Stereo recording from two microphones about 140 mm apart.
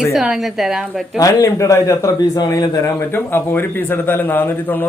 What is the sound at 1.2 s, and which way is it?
A man's voice, 25° left (ahead or behind).